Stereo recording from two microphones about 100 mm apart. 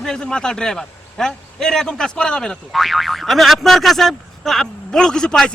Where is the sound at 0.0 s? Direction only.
5° left (ahead or behind).